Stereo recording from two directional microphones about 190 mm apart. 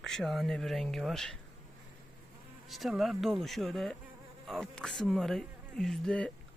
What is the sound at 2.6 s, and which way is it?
Speech, centre (ahead or behind).